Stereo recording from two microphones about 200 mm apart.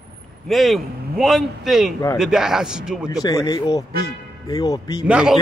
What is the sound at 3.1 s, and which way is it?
Speech, 15° left (ahead or behind).